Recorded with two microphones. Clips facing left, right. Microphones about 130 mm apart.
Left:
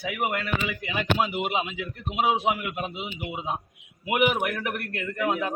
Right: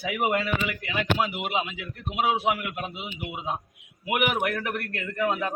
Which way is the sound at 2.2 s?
15° left (ahead or behind).